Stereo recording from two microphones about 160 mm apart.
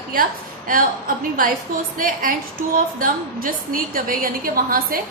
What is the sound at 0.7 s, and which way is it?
A woman's voice, 65° right (ahead or behind).